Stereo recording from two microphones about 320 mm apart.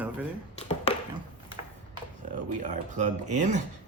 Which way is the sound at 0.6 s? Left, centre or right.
Centre.